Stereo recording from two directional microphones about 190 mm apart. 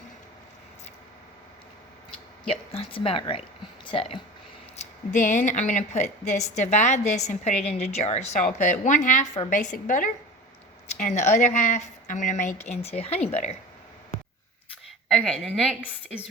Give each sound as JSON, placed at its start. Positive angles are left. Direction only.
{"t": 2.5, "sound": "a woman's voice", "side_deg": 30}
{"t": 4.8, "sound": "speech", "side_deg": 40}
{"t": 15.1, "sound": "a woman's voice", "side_deg": 0}